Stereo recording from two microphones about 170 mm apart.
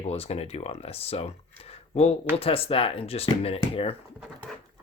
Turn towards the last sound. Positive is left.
turn(degrees=35)  # may be behind; listen again after turning